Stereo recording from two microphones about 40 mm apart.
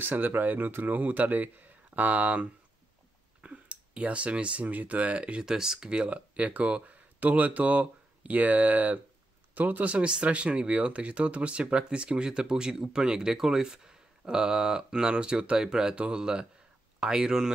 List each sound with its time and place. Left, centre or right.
0.0 s speech: right
5.5 s speech: centre
5.9 s speech: right